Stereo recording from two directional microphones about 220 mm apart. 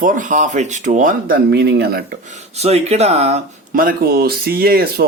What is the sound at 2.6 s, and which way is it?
Speech, 30° right (ahead or behind).